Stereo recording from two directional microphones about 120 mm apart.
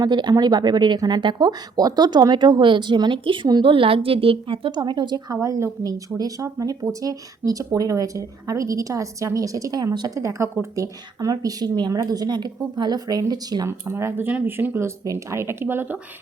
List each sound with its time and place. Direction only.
0.0 s speech: 35° right (ahead or behind)
13.7 s speech: 20° right (ahead or behind)